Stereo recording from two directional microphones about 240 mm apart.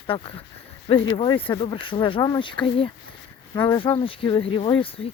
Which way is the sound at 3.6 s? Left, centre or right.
Centre.